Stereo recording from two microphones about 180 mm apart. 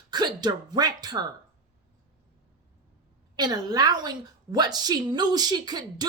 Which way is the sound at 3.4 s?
20° right (ahead or behind).